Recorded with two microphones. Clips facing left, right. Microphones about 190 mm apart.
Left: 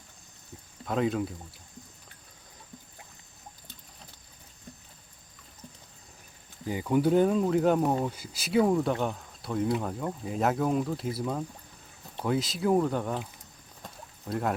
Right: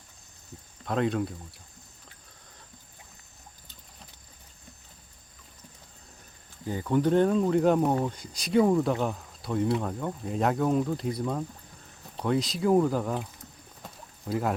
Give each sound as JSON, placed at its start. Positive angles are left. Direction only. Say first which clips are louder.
{"t": 0.9, "sound": "speech", "louder": "right 1 dB", "side_deg": 0}
{"t": 6.7, "sound": "speech", "louder": "even", "side_deg": 10}
{"t": 13.8, "sound": "a sound", "louder": "right 2 dB", "side_deg": 0}